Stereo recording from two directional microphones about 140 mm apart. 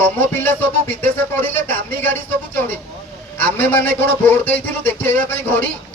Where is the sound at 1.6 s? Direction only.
15° left (ahead or behind).